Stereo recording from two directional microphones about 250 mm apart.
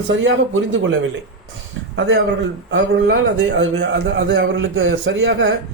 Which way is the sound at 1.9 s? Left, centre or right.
Right.